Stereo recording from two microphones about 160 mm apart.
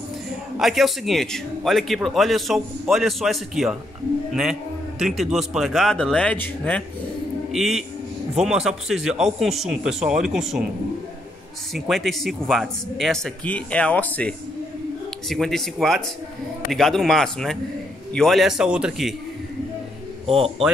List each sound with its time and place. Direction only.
0.6 s speech: centre (ahead or behind)
7.5 s speech: centre (ahead or behind)
11.7 s speech: centre (ahead or behind)
20.2 s speech: 35° right (ahead or behind)